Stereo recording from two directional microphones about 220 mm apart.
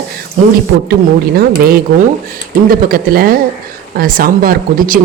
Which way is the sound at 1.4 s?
45° right (ahead or behind).